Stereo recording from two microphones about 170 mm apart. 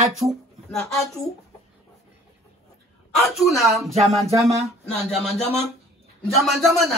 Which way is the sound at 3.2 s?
Centre (ahead or behind).